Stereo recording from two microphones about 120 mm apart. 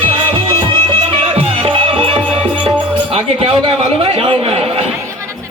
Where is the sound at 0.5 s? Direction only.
45° right (ahead or behind).